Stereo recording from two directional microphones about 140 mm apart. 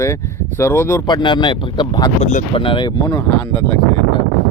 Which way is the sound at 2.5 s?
35° left (ahead or behind).